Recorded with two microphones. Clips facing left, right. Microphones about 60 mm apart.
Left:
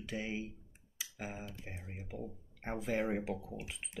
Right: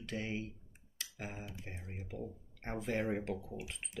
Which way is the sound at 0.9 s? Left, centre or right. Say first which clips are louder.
Left 1 dB; centre.